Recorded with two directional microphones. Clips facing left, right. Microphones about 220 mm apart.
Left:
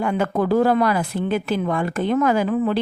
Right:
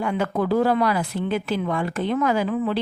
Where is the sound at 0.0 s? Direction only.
50° left (ahead or behind).